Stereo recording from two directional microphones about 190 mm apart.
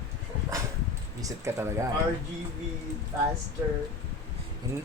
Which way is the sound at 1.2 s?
15° right (ahead or behind).